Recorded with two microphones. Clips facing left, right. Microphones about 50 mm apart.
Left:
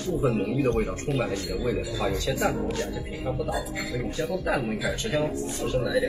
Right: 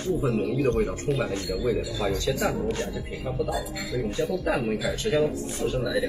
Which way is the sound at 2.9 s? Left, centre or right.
Centre.